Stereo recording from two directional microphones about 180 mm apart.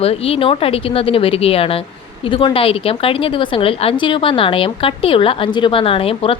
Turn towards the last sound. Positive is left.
turn(degrees=30)  # may be behind; listen again after turning